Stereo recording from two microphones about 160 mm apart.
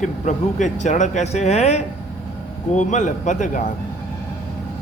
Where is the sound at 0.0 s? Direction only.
50° left (ahead or behind).